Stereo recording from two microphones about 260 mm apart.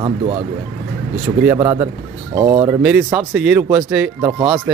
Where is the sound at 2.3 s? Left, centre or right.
Right.